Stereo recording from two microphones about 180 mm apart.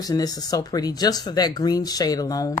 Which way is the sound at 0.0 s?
20° left (ahead or behind).